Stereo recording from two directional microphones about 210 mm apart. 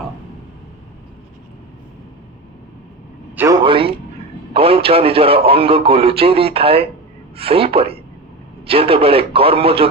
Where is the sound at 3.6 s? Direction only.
25° right (ahead or behind).